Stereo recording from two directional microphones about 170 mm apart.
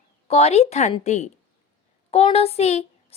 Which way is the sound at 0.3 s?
35° left (ahead or behind).